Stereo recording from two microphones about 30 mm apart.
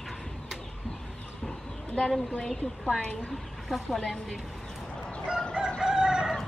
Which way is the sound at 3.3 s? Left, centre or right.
Centre.